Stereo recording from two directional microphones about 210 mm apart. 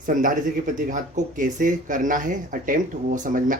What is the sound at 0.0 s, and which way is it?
Speech, 40° right (ahead or behind).